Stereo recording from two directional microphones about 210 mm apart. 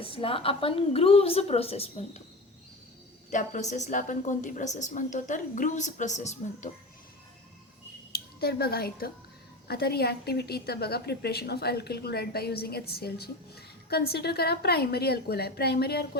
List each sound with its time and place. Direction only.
0.0 s a woman's voice: 25° left (ahead or behind)
3.2 s a woman's voice: 35° left (ahead or behind)
8.1 s a woman's voice: 50° left (ahead or behind)